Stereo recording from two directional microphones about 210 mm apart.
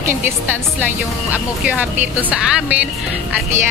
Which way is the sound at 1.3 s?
10° right (ahead or behind).